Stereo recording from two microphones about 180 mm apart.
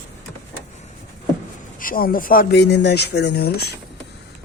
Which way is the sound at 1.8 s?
50° left (ahead or behind).